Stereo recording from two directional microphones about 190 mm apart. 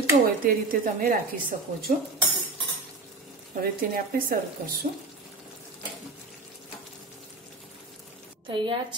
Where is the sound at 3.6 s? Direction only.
50° right (ahead or behind).